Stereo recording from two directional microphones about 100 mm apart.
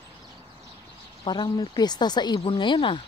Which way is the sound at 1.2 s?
45° left (ahead or behind).